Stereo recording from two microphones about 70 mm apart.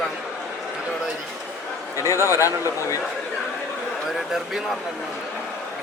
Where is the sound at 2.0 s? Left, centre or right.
Left.